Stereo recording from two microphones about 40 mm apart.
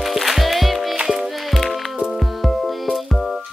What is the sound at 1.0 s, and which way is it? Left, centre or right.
Music, centre.